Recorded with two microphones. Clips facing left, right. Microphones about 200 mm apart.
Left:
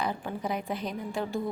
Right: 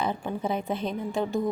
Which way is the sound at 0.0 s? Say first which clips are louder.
Right 3 dB; 25° right (ahead or behind).